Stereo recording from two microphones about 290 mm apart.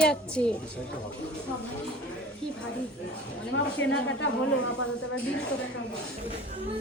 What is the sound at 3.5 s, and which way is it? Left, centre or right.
Speech, left.